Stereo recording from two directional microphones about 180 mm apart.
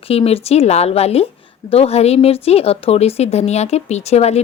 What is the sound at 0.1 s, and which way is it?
Speech, 35° left (ahead or behind).